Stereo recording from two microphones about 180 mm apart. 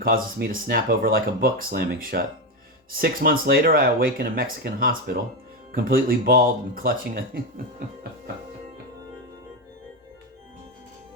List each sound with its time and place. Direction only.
0.0 s speech: 55° right (ahead or behind)